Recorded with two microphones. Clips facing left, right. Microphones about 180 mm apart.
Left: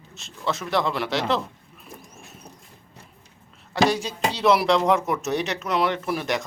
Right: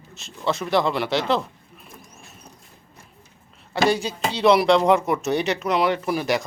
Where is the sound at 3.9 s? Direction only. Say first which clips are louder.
Right 2 dB; centre (ahead or behind).